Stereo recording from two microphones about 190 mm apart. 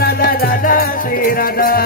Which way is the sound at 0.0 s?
55° left (ahead or behind).